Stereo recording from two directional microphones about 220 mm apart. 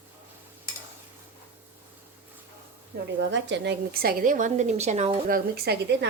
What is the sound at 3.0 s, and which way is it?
A woman's voice, 50° right (ahead or behind).